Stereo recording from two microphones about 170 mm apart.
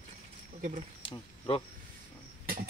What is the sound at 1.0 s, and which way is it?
Speech, 30° left (ahead or behind).